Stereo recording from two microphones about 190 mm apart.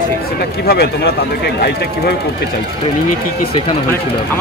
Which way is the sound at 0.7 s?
55° left (ahead or behind).